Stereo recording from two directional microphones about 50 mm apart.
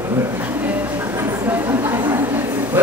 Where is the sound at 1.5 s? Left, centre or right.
Right.